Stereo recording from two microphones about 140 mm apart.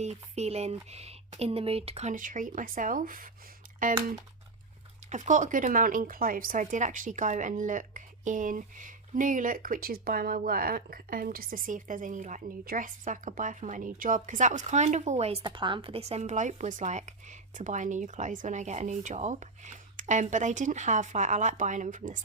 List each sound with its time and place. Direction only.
0.0 s speech: 50° right (ahead or behind)
2.1 s speech: 70° right (ahead or behind)
5.0 s a woman's voice: 60° right (ahead or behind)